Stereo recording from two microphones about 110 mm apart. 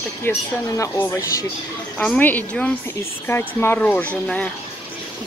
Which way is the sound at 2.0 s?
15° left (ahead or behind).